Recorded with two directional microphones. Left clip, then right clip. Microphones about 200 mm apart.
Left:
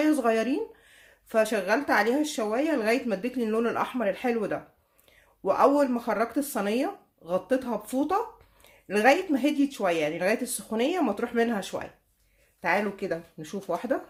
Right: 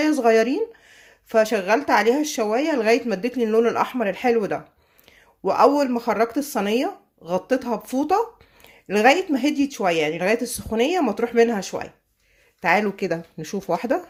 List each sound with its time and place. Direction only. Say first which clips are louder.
0.0 s speech: right 7 dB; 30° right (ahead or behind)